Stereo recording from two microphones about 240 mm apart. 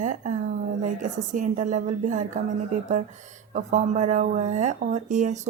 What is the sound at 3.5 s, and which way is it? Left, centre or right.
Speech, right.